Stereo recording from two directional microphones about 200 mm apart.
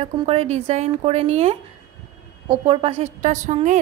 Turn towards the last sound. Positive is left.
turn(degrees=-35)  # may be behind; listen again after turning